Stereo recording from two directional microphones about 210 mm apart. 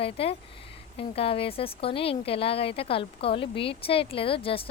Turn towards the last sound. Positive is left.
turn(degrees=25)  # may be behind; listen again after turning